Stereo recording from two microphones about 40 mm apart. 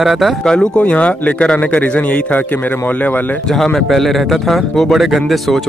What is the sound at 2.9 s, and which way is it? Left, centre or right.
Speech, left.